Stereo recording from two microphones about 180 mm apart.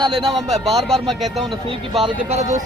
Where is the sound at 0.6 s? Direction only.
Centre (ahead or behind).